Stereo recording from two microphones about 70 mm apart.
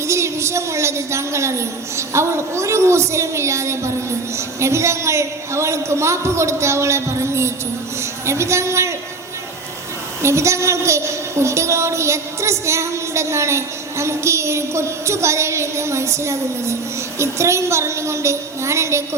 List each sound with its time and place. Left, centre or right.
0.0 s a woman's voice: right
10.2 s a woman's voice: right